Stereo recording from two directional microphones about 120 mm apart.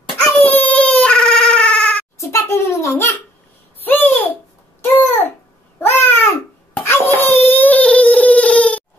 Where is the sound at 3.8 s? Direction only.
15° left (ahead or behind).